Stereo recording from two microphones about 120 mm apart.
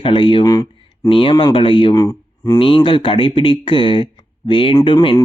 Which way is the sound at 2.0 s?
30° left (ahead or behind).